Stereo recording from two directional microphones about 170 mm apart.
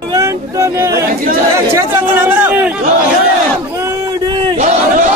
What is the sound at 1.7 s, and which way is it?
Chatter, 15° right (ahead or behind).